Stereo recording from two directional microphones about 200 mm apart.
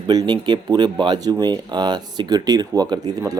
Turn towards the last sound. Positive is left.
turn(degrees=-20)  # may be behind; listen again after turning